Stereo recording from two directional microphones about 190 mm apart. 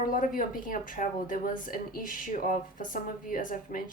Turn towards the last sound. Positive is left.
turn(degrees=45)  # may be behind; listen again after turning